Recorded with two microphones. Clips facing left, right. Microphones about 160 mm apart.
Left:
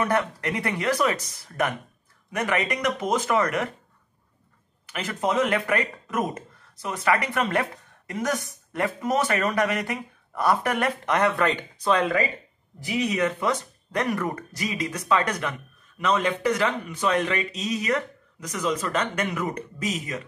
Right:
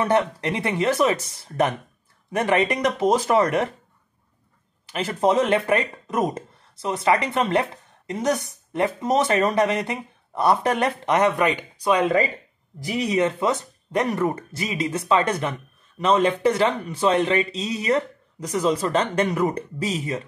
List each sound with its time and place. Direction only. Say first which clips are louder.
0.0 s speech: right 4 dB; 25° right (ahead or behind)
4.8 s speech: right 6 dB; 30° right (ahead or behind); by 12.1 s 15° right (ahead or behind)
12.8 s speech: right 3 dB; 35° right (ahead or behind)